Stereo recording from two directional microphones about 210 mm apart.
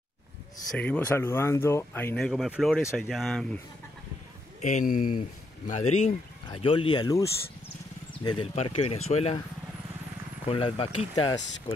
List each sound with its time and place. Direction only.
0.7 s speech: 5° left (ahead or behind)
4.6 s speech: 35° left (ahead or behind)
10.4 s speech: 25° left (ahead or behind)